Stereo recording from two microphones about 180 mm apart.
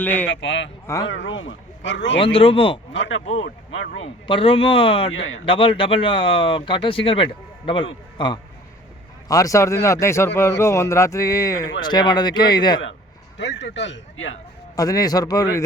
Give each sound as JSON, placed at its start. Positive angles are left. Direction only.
{"t": 0.0, "sound": "speech", "side_deg": 10}
{"t": 0.3, "sound": "a man's voice", "side_deg": 90}
{"t": 2.2, "sound": "speech", "side_deg": 30}
{"t": 2.9, "sound": "a man's voice", "side_deg": 85}
{"t": 3.9, "sound": "a man's voice", "side_deg": 30}
{"t": 5.1, "sound": "a man's voice", "side_deg": 90}
{"t": 5.5, "sound": "speech", "side_deg": 30}
{"t": 9.3, "sound": "speech", "side_deg": 20}
{"t": 13.4, "sound": "speech", "side_deg": 80}
{"t": 14.8, "sound": "speech", "side_deg": 20}